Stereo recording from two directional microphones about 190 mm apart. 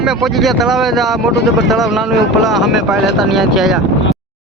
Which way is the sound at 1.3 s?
60° left (ahead or behind).